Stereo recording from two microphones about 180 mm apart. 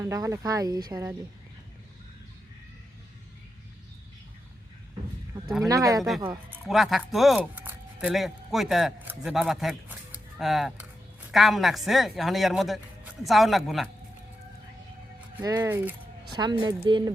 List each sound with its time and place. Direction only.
0.0 s speech: 20° right (ahead or behind)
5.6 s speech: 20° right (ahead or behind)
6.0 s speech: centre (ahead or behind)
15.4 s speech: 15° right (ahead or behind)
16.3 s speech: 25° right (ahead or behind)